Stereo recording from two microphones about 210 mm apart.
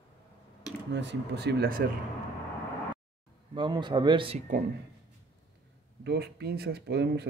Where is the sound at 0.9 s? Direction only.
55° right (ahead or behind).